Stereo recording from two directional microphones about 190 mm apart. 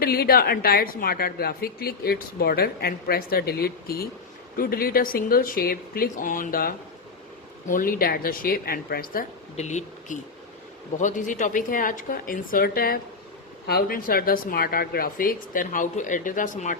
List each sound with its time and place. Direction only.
0.0 s a woman's voice: 55° left (ahead or behind)
9.6 s a woman's voice: 40° left (ahead or behind)